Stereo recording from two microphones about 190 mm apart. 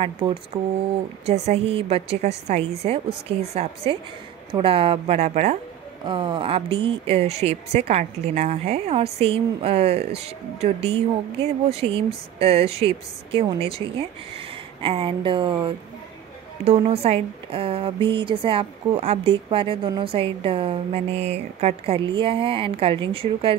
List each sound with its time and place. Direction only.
0.0 s a woman's voice: 25° right (ahead or behind)
6.0 s a woman's voice: 25° right (ahead or behind)